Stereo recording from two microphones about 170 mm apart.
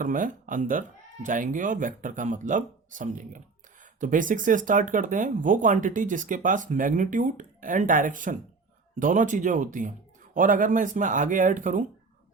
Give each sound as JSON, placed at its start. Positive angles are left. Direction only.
{"t": 0.0, "sound": "speech", "side_deg": -50}